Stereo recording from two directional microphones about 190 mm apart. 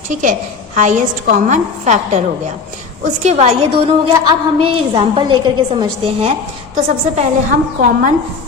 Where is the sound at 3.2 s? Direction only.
35° right (ahead or behind).